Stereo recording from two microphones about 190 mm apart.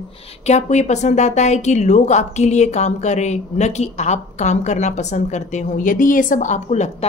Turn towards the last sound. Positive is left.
turn(degrees=35)  # may be behind; listen again after turning